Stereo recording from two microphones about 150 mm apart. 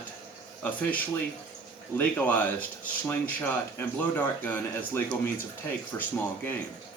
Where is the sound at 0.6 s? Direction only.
10° left (ahead or behind).